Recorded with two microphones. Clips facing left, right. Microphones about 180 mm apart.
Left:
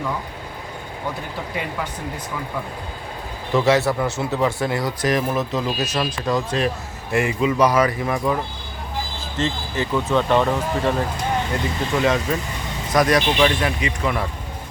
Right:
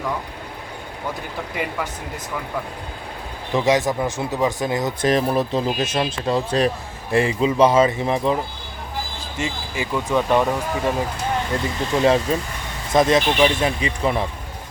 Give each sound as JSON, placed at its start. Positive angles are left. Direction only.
{"t": 3.5, "sound": "speech", "side_deg": -15}
{"t": 9.4, "sound": "speech", "side_deg": -10}
{"t": 11.9, "sound": "speech", "side_deg": -35}